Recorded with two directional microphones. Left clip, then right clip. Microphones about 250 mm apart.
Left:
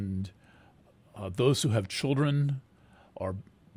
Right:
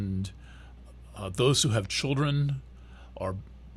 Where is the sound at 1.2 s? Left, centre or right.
Left.